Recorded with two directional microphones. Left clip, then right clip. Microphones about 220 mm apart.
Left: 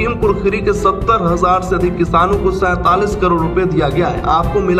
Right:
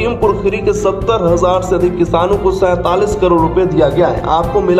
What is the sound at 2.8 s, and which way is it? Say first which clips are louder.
Speech: right 1 dB; 35° left (ahead or behind).